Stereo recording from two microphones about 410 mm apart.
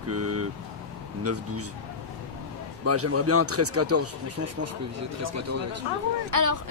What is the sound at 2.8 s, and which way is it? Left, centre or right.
Speech, right.